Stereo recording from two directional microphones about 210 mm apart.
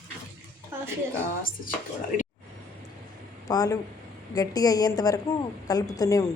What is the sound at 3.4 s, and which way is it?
A woman's voice, 15° left (ahead or behind).